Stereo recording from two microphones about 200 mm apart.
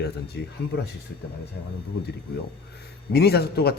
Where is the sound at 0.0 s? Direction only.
55° left (ahead or behind).